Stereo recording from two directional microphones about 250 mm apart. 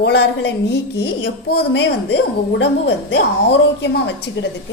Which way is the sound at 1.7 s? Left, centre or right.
Left.